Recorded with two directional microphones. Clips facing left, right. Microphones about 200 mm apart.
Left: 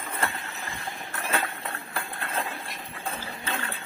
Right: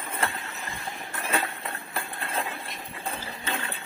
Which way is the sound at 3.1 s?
10° right (ahead or behind).